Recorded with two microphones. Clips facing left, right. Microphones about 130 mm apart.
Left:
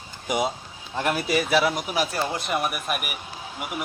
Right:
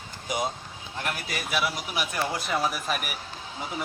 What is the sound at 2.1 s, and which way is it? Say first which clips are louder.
Speech: left 2 dB; 25° left (ahead or behind).